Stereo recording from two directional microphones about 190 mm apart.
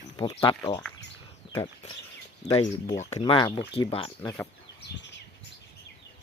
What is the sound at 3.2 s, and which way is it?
Speech, 25° left (ahead or behind).